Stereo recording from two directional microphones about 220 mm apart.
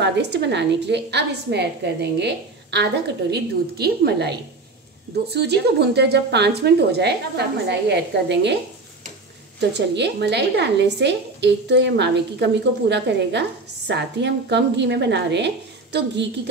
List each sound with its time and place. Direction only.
0.0 s a woman's voice: 50° right (ahead or behind)
9.6 s a woman's voice: 50° right (ahead or behind)